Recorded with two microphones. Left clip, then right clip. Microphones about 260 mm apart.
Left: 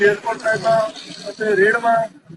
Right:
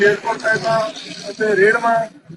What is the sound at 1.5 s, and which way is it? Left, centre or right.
Speech, centre.